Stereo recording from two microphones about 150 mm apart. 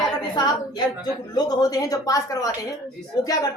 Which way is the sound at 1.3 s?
25° left (ahead or behind).